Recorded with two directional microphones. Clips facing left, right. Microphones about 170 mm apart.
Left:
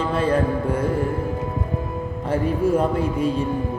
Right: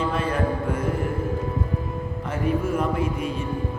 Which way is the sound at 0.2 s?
30° left (ahead or behind).